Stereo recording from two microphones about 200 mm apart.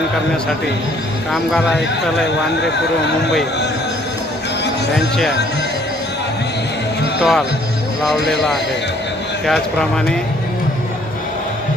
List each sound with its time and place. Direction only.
1.3 s speech: centre (ahead or behind)
2.2 s speech: 60° left (ahead or behind)
7.2 s speech: centre (ahead or behind)
9.5 s speech: 5° left (ahead or behind)